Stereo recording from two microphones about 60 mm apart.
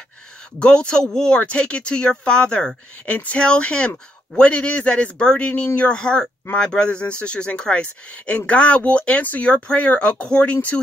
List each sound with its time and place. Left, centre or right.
0.6 s speech: centre